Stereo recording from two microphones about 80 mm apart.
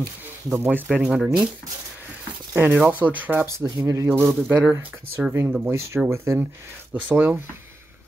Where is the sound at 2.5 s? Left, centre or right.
Right.